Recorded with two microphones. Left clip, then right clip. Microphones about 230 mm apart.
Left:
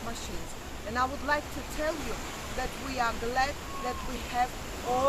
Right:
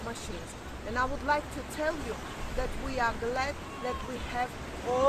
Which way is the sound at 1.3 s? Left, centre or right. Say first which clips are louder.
Right 2 dB; centre.